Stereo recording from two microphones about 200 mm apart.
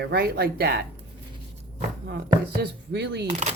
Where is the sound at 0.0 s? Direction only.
55° right (ahead or behind).